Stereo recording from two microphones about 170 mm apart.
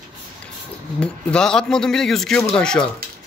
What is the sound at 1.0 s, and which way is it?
Speech, 5° left (ahead or behind).